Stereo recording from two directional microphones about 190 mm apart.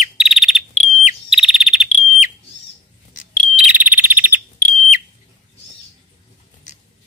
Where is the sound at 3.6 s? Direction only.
10° right (ahead or behind).